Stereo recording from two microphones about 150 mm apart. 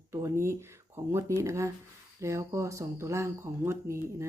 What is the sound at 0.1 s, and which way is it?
Speech, 20° right (ahead or behind).